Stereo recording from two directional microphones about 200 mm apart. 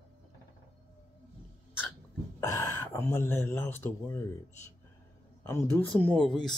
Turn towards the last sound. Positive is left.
turn(degrees=5)  # may be behind; listen again after turning